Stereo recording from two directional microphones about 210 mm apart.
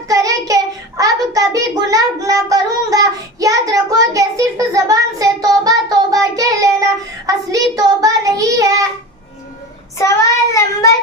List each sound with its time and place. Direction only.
0.1 s child singing: 15° right (ahead or behind)
10.0 s child singing: 15° left (ahead or behind)